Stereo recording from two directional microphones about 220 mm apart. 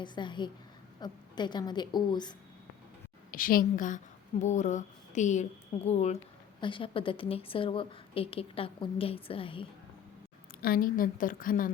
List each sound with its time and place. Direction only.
0.0 s a woman's voice: 20° left (ahead or behind)
3.3 s a woman's voice: 40° left (ahead or behind); by 9.6 s 25° left (ahead or behind)
10.6 s a woman's voice: 40° left (ahead or behind)